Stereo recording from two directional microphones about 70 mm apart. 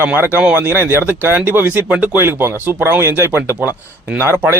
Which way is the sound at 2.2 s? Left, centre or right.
Right.